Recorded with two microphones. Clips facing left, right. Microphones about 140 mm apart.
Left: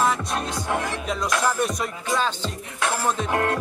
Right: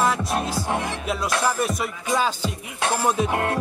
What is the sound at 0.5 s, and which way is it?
Music, 25° right (ahead or behind).